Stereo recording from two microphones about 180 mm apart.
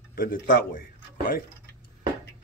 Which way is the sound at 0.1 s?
50° left (ahead or behind).